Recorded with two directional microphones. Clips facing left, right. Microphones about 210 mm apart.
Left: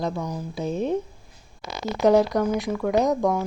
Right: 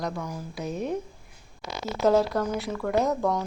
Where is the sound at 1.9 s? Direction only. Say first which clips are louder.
Left 4 dB; 15° left (ahead or behind).